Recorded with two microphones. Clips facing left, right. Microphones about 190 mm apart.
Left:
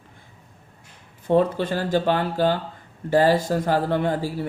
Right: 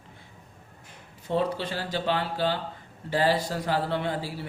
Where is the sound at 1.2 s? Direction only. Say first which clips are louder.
Left 7 dB; 50° left (ahead or behind).